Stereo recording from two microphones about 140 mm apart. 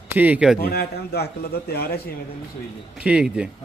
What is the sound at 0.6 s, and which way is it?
Speech, 90° left.